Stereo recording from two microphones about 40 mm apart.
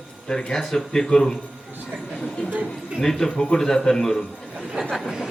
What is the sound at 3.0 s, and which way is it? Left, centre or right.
A man's voice, centre.